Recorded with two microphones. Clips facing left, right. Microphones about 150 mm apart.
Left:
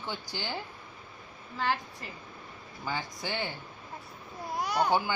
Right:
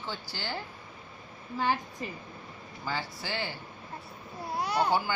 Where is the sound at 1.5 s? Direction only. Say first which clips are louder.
Right 2 dB; 15° right (ahead or behind).